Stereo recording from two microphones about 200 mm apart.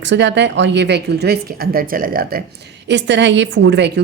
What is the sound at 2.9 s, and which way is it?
A woman's voice, 60° right (ahead or behind).